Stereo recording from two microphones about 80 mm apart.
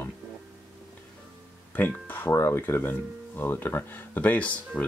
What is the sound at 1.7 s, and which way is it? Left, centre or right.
Speech, left.